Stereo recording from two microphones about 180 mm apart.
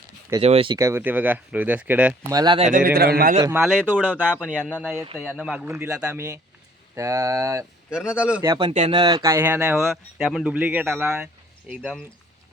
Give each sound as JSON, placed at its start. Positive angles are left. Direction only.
{"t": 0.4, "sound": "speech", "side_deg": -30}
{"t": 0.8, "sound": "speech", "side_deg": -15}
{"t": 2.3, "sound": "speech", "side_deg": -25}
{"t": 2.6, "sound": "a man's voice", "side_deg": -45}
{"t": 3.5, "sound": "a man's voice", "side_deg": 0}
{"t": 4.0, "sound": "speech", "side_deg": -10}
{"t": 7.9, "sound": "a man's voice", "side_deg": -5}
{"t": 8.4, "sound": "speech", "side_deg": -20}
{"t": 8.7, "sound": "speech", "side_deg": -35}
{"t": 9.0, "sound": "a man's voice", "side_deg": -20}